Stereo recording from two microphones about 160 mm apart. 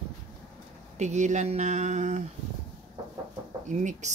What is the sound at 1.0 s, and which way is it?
A woman's voice, 45° right (ahead or behind).